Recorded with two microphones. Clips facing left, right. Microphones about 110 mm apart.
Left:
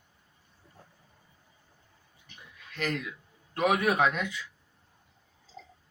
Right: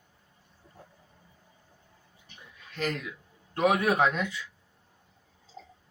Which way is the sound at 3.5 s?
30° right (ahead or behind).